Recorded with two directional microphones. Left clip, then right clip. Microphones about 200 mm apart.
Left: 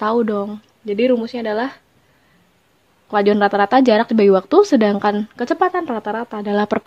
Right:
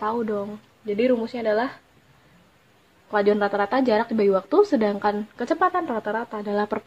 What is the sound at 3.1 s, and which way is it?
Speech, 50° left (ahead or behind).